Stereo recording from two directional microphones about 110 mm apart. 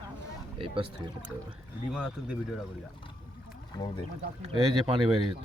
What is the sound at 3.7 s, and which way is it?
Speech, 40° left (ahead or behind).